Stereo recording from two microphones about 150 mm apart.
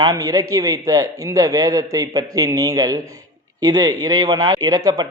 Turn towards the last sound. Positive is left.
turn(degrees=-25)  # may be behind; listen again after turning